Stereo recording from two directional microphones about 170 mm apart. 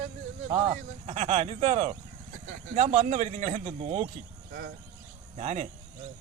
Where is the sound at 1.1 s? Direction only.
35° right (ahead or behind).